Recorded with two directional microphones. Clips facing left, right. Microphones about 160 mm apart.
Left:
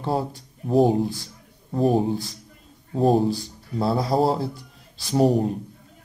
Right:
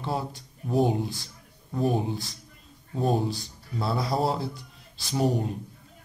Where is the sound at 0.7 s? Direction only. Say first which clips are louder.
Left 6 dB; 35° left (ahead or behind).